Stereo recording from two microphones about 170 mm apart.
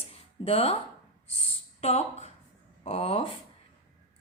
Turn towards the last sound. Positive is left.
turn(degrees=35)  # may be behind; listen again after turning